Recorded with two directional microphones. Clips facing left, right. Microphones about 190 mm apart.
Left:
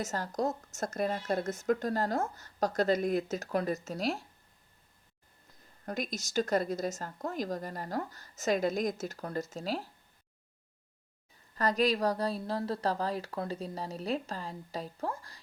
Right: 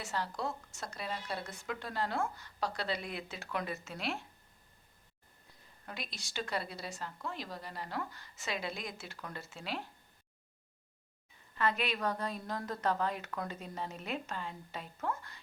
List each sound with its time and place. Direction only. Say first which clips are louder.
0.0 s speech: left 5 dB; 45° left (ahead or behind)
5.8 s speech: left 10 dB; 45° left (ahead or behind)
11.5 s a woman's voice: left 6 dB; 40° left (ahead or behind)